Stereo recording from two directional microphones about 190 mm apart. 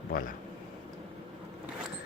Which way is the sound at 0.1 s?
45° left (ahead or behind).